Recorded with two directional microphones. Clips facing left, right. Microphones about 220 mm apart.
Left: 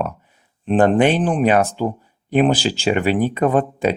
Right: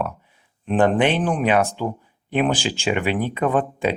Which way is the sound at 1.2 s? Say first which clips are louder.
Left 3 dB; 30° left (ahead or behind).